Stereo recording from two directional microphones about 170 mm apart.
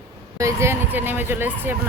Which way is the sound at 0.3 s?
15° right (ahead or behind).